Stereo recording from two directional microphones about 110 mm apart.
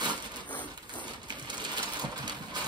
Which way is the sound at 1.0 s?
40° right (ahead or behind).